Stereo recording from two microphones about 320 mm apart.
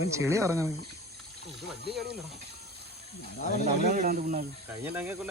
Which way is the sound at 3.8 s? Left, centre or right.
Right.